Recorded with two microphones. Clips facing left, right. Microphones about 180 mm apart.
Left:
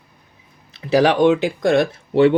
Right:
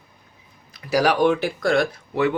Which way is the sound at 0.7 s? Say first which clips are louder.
Left 4 dB; 25° left (ahead or behind).